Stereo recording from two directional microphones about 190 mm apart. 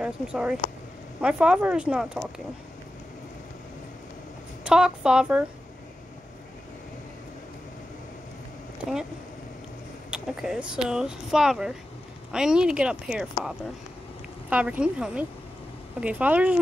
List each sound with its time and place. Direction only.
0.0 s speech: 5° right (ahead or behind)
4.6 s speech: 5° right (ahead or behind)
10.1 s speech: 5° right (ahead or behind)
14.5 s speech: 5° right (ahead or behind)